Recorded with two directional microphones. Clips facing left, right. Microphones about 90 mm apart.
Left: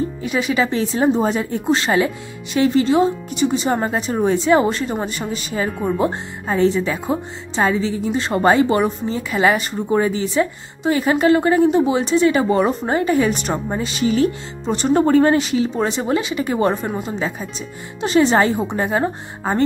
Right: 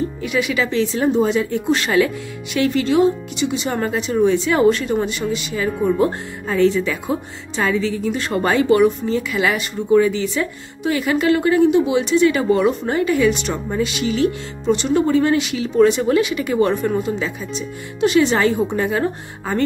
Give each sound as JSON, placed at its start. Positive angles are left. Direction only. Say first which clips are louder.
{"t": 0.2, "sound": "speech", "louder": "left 1 dB", "side_deg": 35}
{"t": 5.9, "sound": "speech", "louder": "right 4 dB", "side_deg": 25}